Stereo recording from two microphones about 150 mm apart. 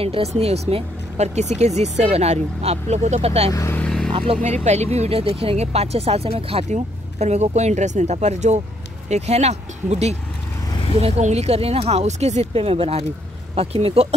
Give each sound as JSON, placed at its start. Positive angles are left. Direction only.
{"t": 0.0, "sound": "speech", "side_deg": -40}
{"t": 3.5, "sound": "speech", "side_deg": 20}
{"t": 3.8, "sound": "vehicle", "side_deg": 5}
{"t": 4.1, "sound": "speech", "side_deg": -35}
{"t": 4.6, "sound": "speech", "side_deg": -45}